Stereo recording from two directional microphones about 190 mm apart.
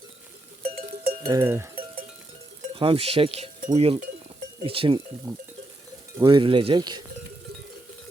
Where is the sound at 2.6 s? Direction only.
30° right (ahead or behind).